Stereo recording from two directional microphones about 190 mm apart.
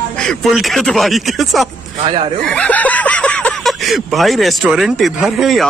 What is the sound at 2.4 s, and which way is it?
Speech, 5° left (ahead or behind).